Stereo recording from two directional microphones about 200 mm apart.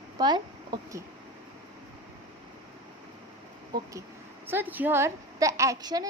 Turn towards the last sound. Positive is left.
turn(degrees=-20)  # may be behind; listen again after turning